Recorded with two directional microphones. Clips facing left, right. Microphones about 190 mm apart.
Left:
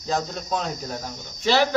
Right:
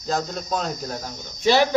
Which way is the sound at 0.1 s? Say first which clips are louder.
Right 1 dB; centre (ahead or behind).